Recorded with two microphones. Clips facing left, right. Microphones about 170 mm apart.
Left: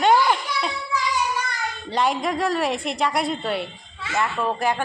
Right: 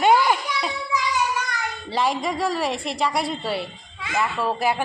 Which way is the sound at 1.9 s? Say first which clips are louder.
Left 1 dB; centre (ahead or behind).